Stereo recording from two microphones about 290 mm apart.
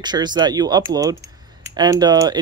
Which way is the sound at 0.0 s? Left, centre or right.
Centre.